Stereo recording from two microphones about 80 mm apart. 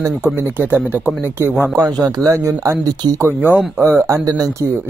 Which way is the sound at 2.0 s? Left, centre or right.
Right.